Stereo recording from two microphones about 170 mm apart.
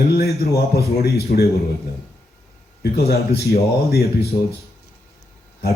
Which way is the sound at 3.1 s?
65° left (ahead or behind).